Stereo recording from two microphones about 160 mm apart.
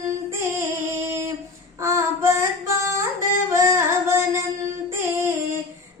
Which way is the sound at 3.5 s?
15° right (ahead or behind).